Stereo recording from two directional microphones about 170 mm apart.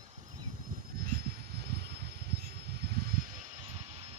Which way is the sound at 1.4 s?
70° right (ahead or behind).